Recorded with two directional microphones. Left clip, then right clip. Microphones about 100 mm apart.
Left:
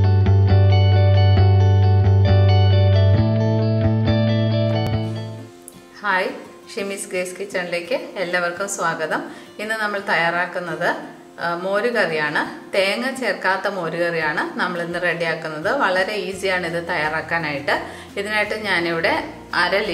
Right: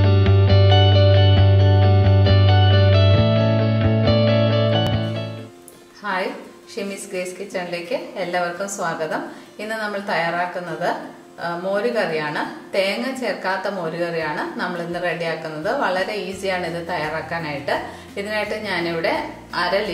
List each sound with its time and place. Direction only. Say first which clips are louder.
0.0 s music: right 4 dB; centre (ahead or behind)
6.0 s music: left 4 dB; 25° left (ahead or behind)
6.7 s a woman's voice: left 2 dB; 25° left (ahead or behind)